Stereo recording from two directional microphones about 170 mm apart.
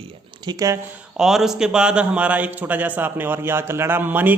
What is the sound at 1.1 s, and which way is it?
A man's voice, centre (ahead or behind).